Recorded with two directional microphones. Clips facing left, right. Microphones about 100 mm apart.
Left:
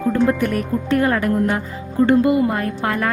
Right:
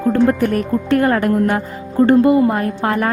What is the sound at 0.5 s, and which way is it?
A woman's voice, 55° right (ahead or behind).